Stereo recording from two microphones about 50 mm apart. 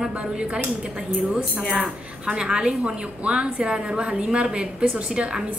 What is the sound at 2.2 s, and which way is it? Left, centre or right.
A woman's voice, centre.